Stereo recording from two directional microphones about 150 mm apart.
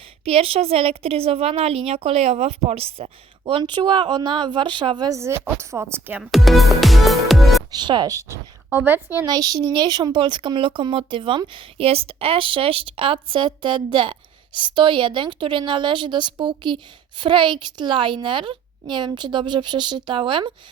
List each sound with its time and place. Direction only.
0.3 s a woman's voice: 40° right (ahead or behind); by 7.6 s centre (ahead or behind)
7.7 s speech: 30° right (ahead or behind); by 9.2 s 15° right (ahead or behind)
9.2 s a woman's voice: 25° right (ahead or behind)